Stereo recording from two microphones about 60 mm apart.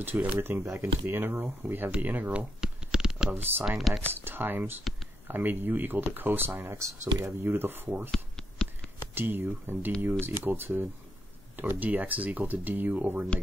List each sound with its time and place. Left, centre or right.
0.0 s speech: right
0.7 s speech: right
2.6 s shuffling cards: centre
3.3 s speech: right
3.6 s speech: centre
4.1 s speech: right
8.1 s a sound: centre
9.1 s speech: right